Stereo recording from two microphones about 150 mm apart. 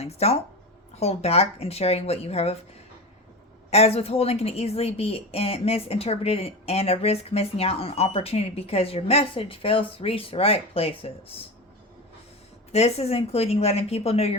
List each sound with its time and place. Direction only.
0.0 s a woman's voice: 45° left (ahead or behind)
3.7 s a woman's voice: 45° left (ahead or behind)
12.7 s a woman's voice: 45° left (ahead or behind)